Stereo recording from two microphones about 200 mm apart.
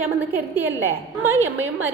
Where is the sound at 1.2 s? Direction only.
10° right (ahead or behind).